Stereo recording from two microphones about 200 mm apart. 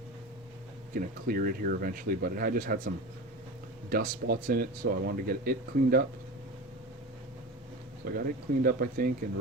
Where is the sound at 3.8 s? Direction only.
50° right (ahead or behind).